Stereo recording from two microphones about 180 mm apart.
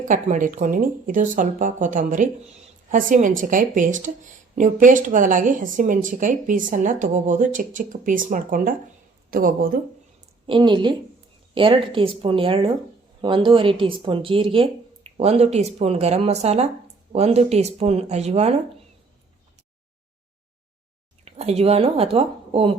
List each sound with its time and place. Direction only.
0.0 s speech: 45° right (ahead or behind)
10.4 s speech: 25° right (ahead or behind)
21.2 s a woman's voice: 35° right (ahead or behind)